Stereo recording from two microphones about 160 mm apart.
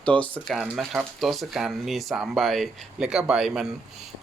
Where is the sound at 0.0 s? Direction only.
10° left (ahead or behind).